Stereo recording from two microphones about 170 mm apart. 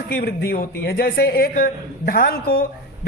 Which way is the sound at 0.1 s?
65° left (ahead or behind).